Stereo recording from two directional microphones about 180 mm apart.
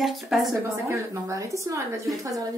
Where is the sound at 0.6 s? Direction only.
15° right (ahead or behind).